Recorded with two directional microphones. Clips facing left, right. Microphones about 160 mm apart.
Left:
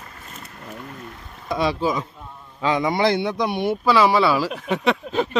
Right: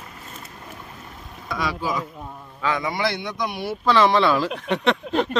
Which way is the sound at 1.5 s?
25° left (ahead or behind).